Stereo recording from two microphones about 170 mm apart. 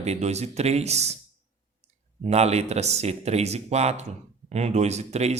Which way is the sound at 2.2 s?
40° right (ahead or behind).